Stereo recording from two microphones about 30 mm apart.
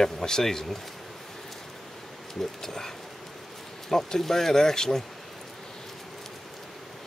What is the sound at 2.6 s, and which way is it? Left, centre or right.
Speech, centre.